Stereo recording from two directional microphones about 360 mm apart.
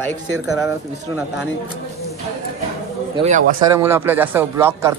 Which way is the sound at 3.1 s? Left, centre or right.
Centre.